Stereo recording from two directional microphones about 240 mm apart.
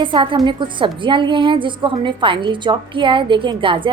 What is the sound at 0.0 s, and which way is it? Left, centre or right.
Speech, right.